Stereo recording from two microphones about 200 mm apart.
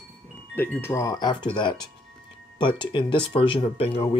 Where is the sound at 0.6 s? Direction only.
10° left (ahead or behind).